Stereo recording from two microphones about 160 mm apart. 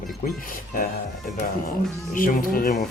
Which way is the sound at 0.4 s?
60° left (ahead or behind).